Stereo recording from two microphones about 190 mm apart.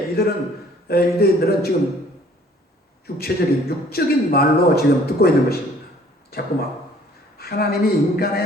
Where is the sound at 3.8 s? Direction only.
55° left (ahead or behind).